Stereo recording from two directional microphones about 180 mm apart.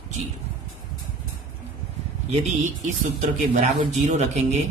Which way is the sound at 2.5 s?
40° right (ahead or behind).